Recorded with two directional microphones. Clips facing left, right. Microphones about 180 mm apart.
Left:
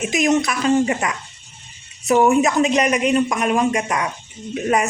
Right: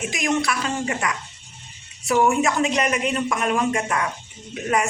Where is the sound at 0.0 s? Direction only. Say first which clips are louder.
Left 5 dB; 20° left (ahead or behind).